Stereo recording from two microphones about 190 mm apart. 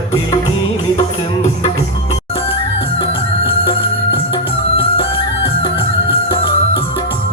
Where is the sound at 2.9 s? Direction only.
30° left (ahead or behind).